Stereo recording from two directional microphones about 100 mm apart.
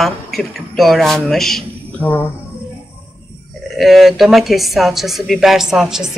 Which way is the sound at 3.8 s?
Centre (ahead or behind).